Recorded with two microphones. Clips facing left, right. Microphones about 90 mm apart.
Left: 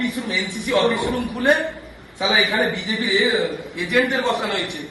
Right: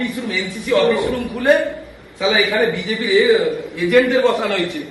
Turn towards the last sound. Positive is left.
turn(degrees=20)  # may be behind; listen again after turning